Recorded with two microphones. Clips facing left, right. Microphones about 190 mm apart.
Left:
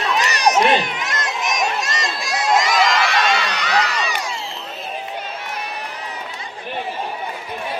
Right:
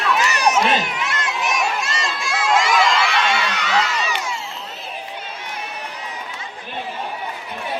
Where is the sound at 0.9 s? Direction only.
40° left (ahead or behind).